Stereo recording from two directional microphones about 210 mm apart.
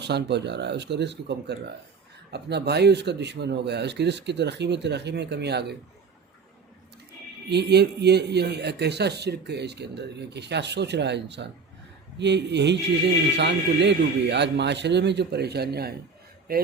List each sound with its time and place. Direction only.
0.0 s a man's voice: 55° right (ahead or behind)
7.5 s a man's voice: 50° right (ahead or behind)